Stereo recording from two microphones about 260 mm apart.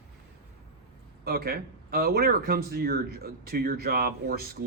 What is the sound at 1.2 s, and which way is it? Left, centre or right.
Speech, right.